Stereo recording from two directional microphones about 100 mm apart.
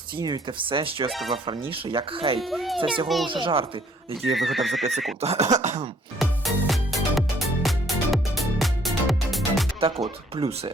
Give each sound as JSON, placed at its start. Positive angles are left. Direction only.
{"t": 0.2, "sound": "speech", "side_deg": -45}
{"t": 2.4, "sound": "speech", "side_deg": 0}
{"t": 2.7, "sound": "speech", "side_deg": -60}
{"t": 4.4, "sound": "speech", "side_deg": 0}
{"t": 5.2, "sound": "cough", "side_deg": -90}
{"t": 6.1, "sound": "music", "side_deg": 0}
{"t": 9.8, "sound": "speech", "side_deg": -70}